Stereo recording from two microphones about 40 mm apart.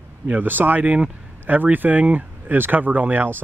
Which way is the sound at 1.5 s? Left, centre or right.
Right.